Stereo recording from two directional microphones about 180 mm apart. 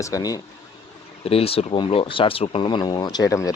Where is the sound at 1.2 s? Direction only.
30° left (ahead or behind).